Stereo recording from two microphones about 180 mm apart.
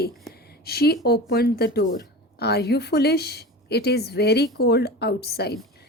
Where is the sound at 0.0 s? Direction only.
60° left (ahead or behind).